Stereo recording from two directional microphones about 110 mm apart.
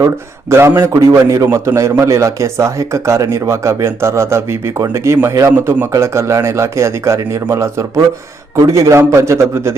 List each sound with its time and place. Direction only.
0.5 s speech: 25° right (ahead or behind)